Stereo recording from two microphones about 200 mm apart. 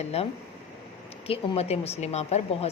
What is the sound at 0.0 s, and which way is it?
Speech, 30° left (ahead or behind).